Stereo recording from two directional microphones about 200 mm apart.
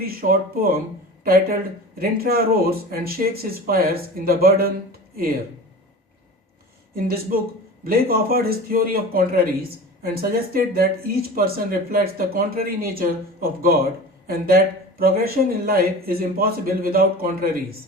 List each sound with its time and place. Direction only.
0.0 s speech: 45° right (ahead or behind)
6.9 s speech: 50° right (ahead or behind)